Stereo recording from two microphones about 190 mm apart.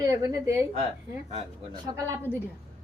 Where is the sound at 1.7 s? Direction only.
20° right (ahead or behind).